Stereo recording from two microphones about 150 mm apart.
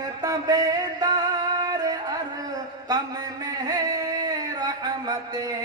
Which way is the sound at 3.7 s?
25° right (ahead or behind).